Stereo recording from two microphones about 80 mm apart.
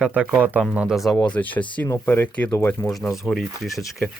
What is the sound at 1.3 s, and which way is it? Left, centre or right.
Speech, centre.